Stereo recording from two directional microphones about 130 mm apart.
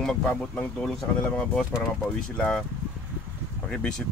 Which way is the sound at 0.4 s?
5° left (ahead or behind).